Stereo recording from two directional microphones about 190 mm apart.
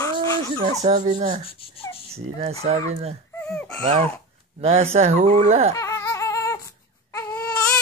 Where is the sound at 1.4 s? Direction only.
30° left (ahead or behind).